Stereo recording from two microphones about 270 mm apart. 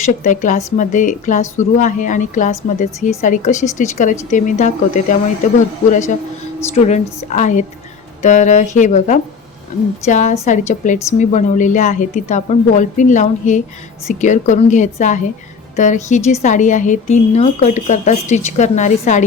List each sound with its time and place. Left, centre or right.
0.0 s a woman's voice: left